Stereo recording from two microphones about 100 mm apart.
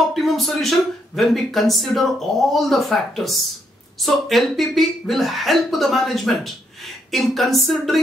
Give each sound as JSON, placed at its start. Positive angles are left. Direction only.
{"t": 0.1, "sound": "speech", "side_deg": 0}